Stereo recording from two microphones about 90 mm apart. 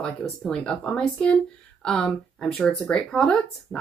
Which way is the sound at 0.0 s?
5° left (ahead or behind).